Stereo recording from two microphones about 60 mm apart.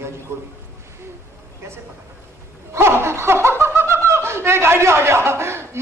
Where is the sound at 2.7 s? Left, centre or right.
Right.